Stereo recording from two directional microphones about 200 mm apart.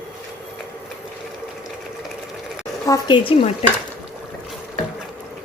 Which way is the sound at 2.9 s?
25° left (ahead or behind).